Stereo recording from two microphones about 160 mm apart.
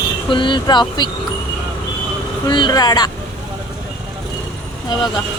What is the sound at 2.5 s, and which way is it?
Speech, 30° left (ahead or behind).